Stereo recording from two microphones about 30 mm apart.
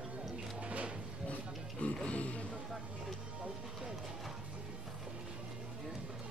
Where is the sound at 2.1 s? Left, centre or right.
Left.